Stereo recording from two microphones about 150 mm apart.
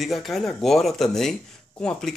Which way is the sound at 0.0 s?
Centre (ahead or behind).